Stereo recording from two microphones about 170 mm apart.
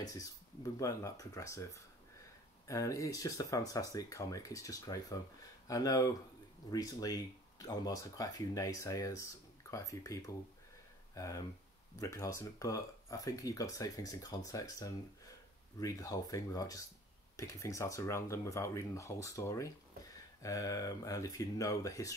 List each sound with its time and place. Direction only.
0.0 s speech: 20° left (ahead or behind)